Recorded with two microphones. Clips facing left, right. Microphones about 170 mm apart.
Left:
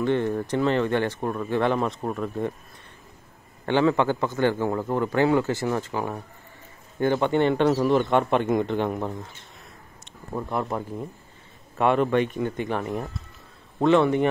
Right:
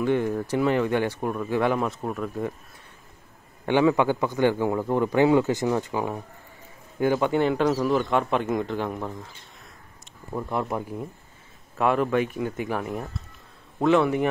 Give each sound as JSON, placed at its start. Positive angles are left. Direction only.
{"t": 0.0, "sound": "a man's voice", "side_deg": -10}
{"t": 3.6, "sound": "a man's voice", "side_deg": -10}
{"t": 10.7, "sound": "a man's voice", "side_deg": -10}